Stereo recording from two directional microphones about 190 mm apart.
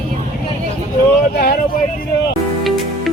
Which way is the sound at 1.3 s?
50° left (ahead or behind).